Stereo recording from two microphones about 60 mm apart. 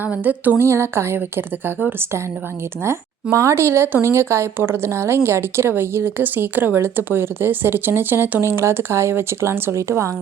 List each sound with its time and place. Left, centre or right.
0.0 s a sound: right
0.5 s a woman's voice: right
3.3 s a woman's voice: right